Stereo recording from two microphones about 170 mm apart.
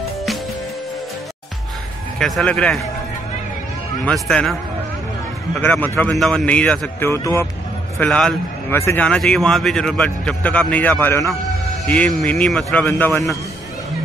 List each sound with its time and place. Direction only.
2.1 s speech: centre (ahead or behind)
4.0 s speech: 5° left (ahead or behind)
5.6 s a man's voice: 10° left (ahead or behind)
8.0 s a man's voice: 5° left (ahead or behind)